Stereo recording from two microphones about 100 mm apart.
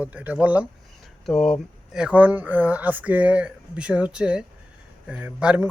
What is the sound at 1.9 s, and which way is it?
A man's voice, 10° right (ahead or behind).